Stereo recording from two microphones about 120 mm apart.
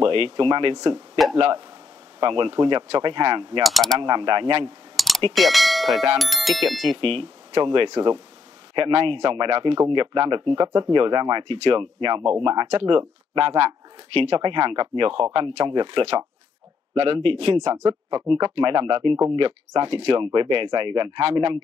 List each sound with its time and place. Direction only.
0.0 s speech: 45° right (ahead or behind)
0.7 s speech: 35° right (ahead or behind)
2.1 s speech: 45° right (ahead or behind)
3.6 s speech: centre (ahead or behind)
4.0 s speech: 40° right (ahead or behind)
4.9 s a sound: centre (ahead or behind)
5.3 s bell: centre (ahead or behind)
6.1 s speech: centre (ahead or behind)
6.9 s speech: 45° right (ahead or behind)
17.6 s speech: 70° right (ahead or behind)
17.8 s speech: 40° right (ahead or behind)